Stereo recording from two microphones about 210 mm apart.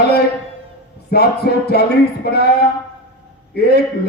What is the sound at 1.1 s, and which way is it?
A man's voice, 50° left (ahead or behind).